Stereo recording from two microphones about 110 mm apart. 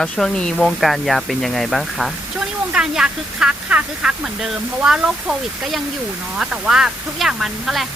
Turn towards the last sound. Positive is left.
turn(degrees=0)  # may be behind; listen again after turning